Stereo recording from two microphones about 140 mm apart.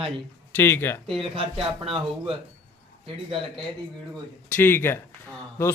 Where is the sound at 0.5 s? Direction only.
15° left (ahead or behind).